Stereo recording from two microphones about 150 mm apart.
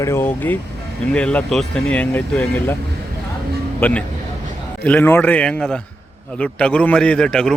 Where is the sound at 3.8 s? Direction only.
15° left (ahead or behind).